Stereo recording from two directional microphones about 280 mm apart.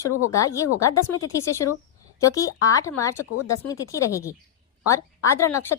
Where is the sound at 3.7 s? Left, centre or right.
Centre.